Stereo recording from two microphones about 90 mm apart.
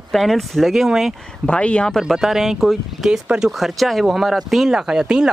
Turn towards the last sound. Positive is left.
turn(degrees=-5)  # may be behind; listen again after turning